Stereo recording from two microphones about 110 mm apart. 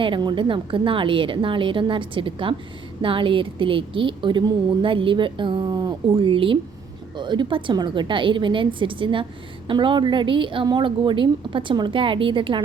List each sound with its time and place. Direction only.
0.0 s a woman's voice: 45° right (ahead or behind)
6.1 s a woman's voice: 55° right (ahead or behind)